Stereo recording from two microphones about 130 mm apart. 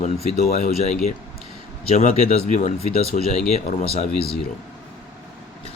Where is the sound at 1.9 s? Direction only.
55° left (ahead or behind).